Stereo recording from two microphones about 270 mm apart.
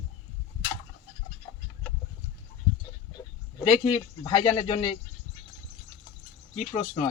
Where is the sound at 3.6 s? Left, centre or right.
Centre.